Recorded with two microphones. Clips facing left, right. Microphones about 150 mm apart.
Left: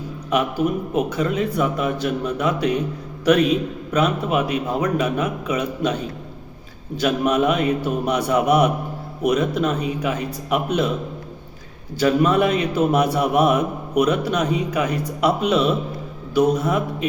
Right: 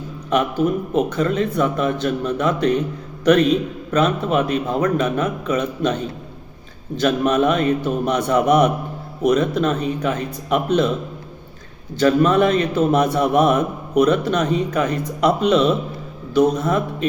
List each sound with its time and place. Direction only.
0.3 s a man's voice: 10° left (ahead or behind)
11.9 s a man's voice: 10° left (ahead or behind)